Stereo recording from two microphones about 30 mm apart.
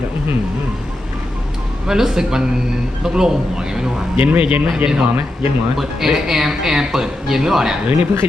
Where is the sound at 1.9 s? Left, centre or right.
Centre.